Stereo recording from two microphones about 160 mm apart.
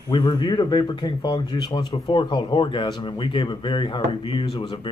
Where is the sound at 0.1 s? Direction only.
25° left (ahead or behind).